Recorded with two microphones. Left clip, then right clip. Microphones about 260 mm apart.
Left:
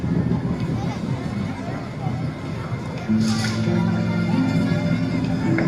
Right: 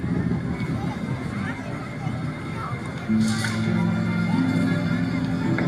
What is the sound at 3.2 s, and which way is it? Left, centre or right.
Music, left.